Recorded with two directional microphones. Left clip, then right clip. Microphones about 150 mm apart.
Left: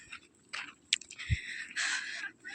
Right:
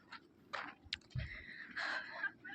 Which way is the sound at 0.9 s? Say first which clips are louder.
Left 15 dB; 20° right (ahead or behind).